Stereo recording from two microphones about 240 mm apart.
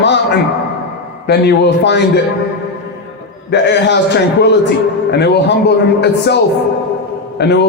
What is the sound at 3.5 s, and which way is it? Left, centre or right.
Speech, left.